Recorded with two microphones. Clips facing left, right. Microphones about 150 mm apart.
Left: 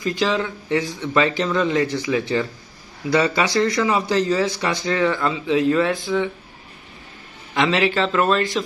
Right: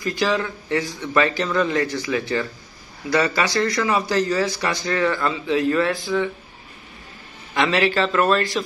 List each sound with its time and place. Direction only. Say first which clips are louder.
0.0 s a man's voice: left 1 dB; 20° left (ahead or behind)
7.5 s a man's voice: even; 15° left (ahead or behind)